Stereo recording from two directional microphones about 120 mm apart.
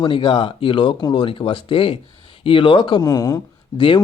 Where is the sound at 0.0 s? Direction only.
45° left (ahead or behind).